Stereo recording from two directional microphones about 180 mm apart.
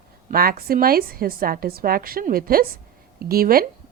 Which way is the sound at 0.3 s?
55° right (ahead or behind).